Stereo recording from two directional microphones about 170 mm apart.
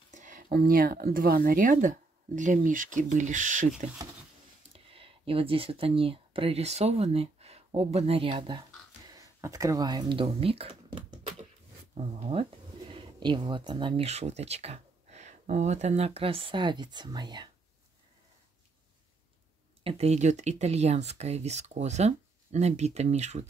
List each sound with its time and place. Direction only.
0.1 s speech: 50° right (ahead or behind)
4.9 s speech: 30° right (ahead or behind)
19.8 s speech: 35° right (ahead or behind)